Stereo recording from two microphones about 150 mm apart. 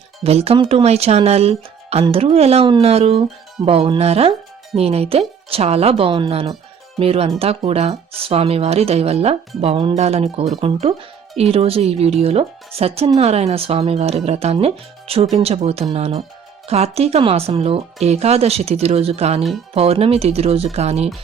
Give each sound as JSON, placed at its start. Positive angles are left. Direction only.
{"t": 0.2, "sound": "speech", "side_deg": -40}